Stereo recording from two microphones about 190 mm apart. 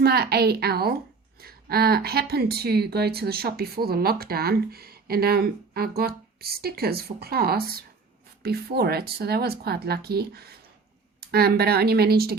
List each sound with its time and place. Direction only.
0.0 s speech: 55° right (ahead or behind)